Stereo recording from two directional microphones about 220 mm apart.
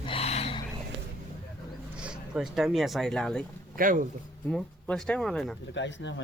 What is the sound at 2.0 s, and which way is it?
Speech, 5° right (ahead or behind).